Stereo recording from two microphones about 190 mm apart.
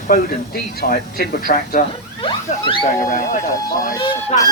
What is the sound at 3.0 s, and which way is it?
Speech, 45° left (ahead or behind).